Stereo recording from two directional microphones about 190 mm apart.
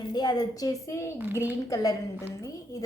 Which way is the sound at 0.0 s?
20° left (ahead or behind).